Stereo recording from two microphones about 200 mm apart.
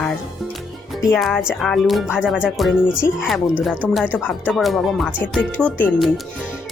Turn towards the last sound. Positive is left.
turn(degrees=5)  # may be behind; listen again after turning